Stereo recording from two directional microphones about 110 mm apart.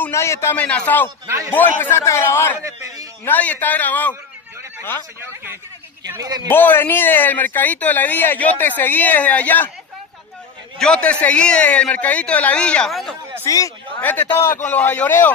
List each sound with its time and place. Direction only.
0.1 s speech: 25° left (ahead or behind)
1.2 s a man's voice: 30° right (ahead or behind)
1.5 s a man's voice: 20° left (ahead or behind)
2.6 s a sound: 30° right (ahead or behind)
3.3 s speech: 15° left (ahead or behind)
6.1 s a man's voice: 35° right (ahead or behind)
6.5 s speech: 20° left (ahead or behind)
10.8 s speech: 10° left (ahead or behind)
13.5 s a man's voice: 35° left (ahead or behind)
14.4 s speech: 20° left (ahead or behind)